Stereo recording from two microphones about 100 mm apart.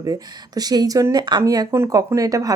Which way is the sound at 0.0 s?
40° right (ahead or behind).